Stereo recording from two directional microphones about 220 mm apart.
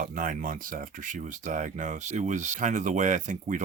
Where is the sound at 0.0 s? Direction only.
40° right (ahead or behind).